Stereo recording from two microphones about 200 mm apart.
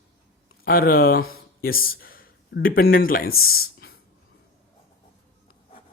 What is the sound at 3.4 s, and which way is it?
Speech, 90° left.